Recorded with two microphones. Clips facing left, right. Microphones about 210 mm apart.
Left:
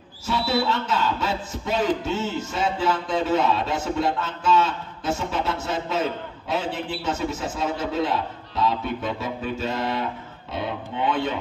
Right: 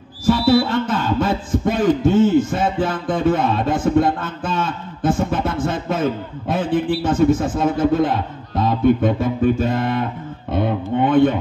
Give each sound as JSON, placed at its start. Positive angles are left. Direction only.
{"t": 0.3, "sound": "a man's voice", "side_deg": -50}